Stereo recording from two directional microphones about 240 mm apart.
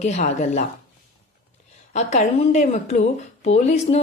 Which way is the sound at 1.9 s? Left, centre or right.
Left.